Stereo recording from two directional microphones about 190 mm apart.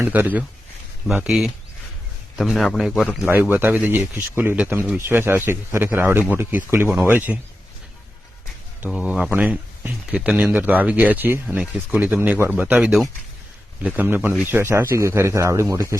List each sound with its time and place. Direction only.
0.0 s speech: 10° right (ahead or behind)
3.5 s speech: 10° right (ahead or behind)
8.8 s speech: 5° right (ahead or behind)